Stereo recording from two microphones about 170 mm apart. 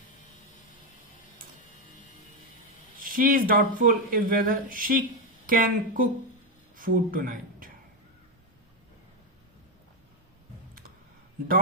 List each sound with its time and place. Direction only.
3.0 s speech: 55° right (ahead or behind)